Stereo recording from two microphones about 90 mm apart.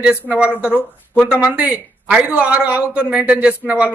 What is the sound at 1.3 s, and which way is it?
A man's voice, 20° right (ahead or behind).